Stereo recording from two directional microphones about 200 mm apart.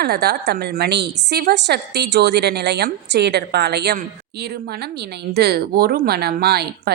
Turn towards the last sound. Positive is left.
turn(degrees=-50)  # may be behind; listen again after turning